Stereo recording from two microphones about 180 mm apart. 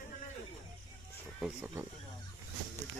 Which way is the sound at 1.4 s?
10° right (ahead or behind).